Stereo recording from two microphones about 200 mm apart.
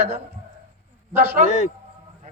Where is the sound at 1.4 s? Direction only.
35° left (ahead or behind).